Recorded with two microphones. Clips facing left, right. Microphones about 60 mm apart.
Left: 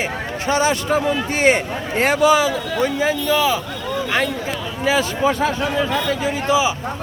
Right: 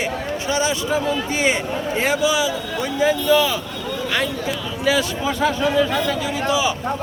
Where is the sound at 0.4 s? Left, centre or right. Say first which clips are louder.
Left 4 dB; left.